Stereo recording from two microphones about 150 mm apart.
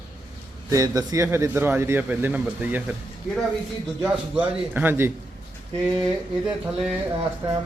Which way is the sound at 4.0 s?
10° right (ahead or behind).